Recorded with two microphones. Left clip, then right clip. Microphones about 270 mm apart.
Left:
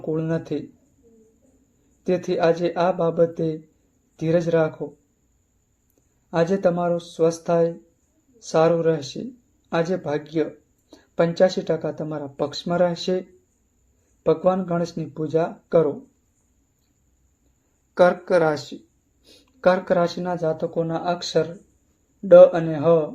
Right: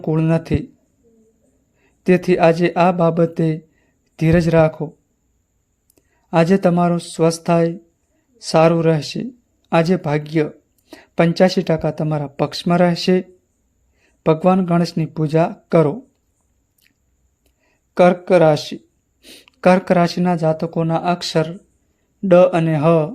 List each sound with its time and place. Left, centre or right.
0.0 s speech: right
2.0 s speech: right
6.3 s speech: right
14.3 s speech: right
18.3 s speech: right